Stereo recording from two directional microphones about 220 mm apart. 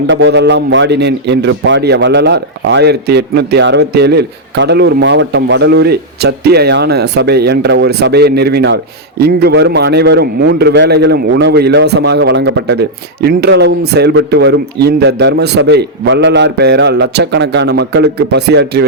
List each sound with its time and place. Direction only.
0.1 s a man's voice: 50° right (ahead or behind)